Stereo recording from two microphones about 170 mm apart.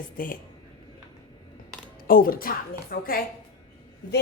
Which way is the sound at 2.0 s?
60° left (ahead or behind).